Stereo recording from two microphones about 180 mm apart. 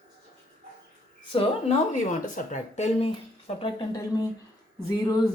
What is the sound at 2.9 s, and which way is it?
Speech, 30° left (ahead or behind).